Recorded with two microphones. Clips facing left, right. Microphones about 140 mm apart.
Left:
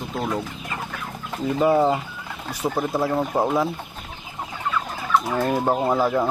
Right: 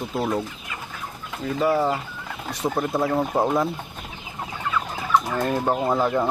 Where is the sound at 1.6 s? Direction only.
20° left (ahead or behind).